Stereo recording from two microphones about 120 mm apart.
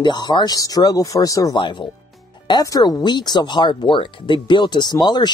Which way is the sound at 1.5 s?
40° left (ahead or behind).